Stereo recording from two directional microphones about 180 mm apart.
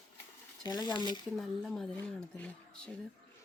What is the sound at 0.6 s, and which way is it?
Speech, 20° left (ahead or behind).